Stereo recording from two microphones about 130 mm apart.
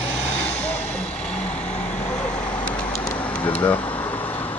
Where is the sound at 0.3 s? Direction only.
10° left (ahead or behind).